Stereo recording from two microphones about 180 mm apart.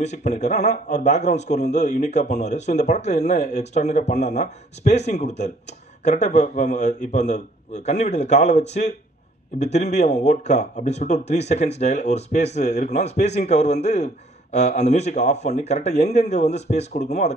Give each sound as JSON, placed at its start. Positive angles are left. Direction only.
{"t": 0.0, "sound": "a man's voice", "side_deg": 40}